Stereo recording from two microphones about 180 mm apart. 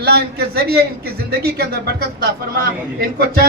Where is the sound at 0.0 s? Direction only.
60° right (ahead or behind).